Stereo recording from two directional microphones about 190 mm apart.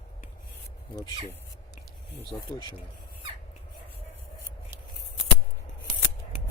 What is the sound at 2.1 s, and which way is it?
Speech, 25° left (ahead or behind).